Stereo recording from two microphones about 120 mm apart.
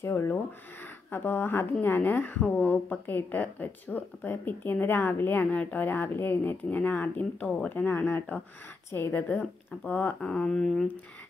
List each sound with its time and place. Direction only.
0.0 s a woman's voice: 20° left (ahead or behind)
10.3 s speech: 5° left (ahead or behind)